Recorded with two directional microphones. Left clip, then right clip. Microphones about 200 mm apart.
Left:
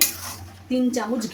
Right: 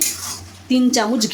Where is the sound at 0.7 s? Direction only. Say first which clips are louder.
Right 7 dB; 40° right (ahead or behind).